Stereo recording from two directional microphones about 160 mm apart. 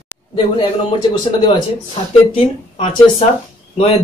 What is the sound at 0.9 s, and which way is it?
Speech, 35° left (ahead or behind).